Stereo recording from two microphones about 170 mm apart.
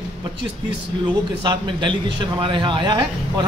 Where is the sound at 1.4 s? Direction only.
25° right (ahead or behind).